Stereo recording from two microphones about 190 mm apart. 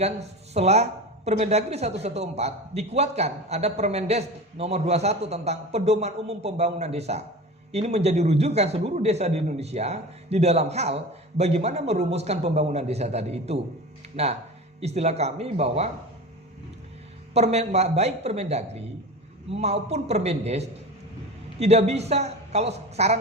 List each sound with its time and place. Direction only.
0.0 s speech: 35° right (ahead or behind)
17.3 s speech: 35° right (ahead or behind)